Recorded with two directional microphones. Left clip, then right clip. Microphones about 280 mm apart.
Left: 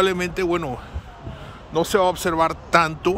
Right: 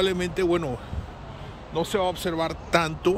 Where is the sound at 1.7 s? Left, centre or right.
Centre.